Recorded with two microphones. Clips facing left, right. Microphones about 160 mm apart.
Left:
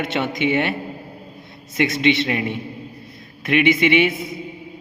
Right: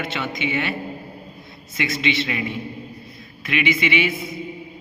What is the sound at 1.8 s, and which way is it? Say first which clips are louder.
A man's voice: left 5 dB; 55° left (ahead or behind).